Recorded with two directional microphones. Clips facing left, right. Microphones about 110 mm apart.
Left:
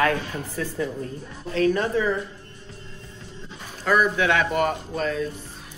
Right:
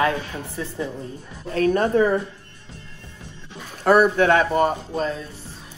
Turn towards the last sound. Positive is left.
turn(degrees=-30)  # may be behind; listen again after turning